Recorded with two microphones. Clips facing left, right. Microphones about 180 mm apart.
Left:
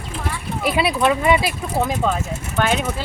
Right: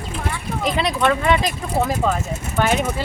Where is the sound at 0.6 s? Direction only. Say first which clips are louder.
Left 1 dB; 10° left (ahead or behind).